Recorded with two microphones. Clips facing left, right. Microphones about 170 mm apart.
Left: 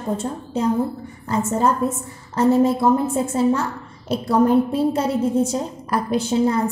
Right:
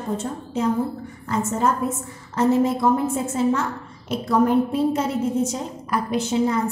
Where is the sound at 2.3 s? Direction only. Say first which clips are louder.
Left 3 dB; 35° left (ahead or behind).